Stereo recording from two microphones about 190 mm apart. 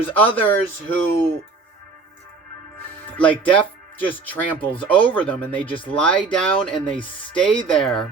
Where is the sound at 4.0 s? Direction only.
10° left (ahead or behind).